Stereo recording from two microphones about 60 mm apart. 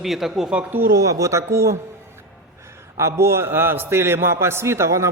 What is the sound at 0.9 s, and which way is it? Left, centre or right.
Speech, right.